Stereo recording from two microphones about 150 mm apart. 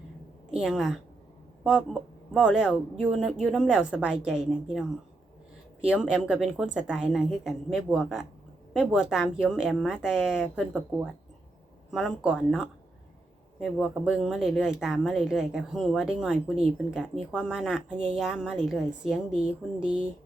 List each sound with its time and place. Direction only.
0.5 s speech: 5° right (ahead or behind)